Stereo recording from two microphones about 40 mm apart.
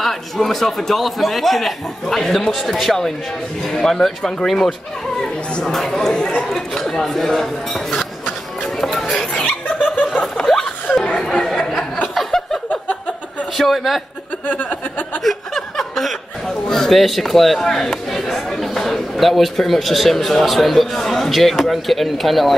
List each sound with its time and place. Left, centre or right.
0.0 s a man's voice: centre
5.7 s speech: centre
8.8 s music: centre
10.2 s chuckle: centre
11.2 s chatter: centre
12.3 s a sound: centre
13.6 s a man's voice: centre
14.5 s speech: left
15.2 s chuckle: centre
16.6 s a man's voice: centre